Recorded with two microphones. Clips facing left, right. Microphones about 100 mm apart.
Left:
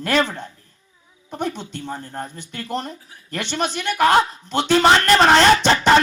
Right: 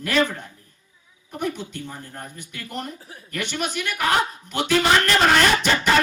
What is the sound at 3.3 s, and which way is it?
Speech, 30° left (ahead or behind).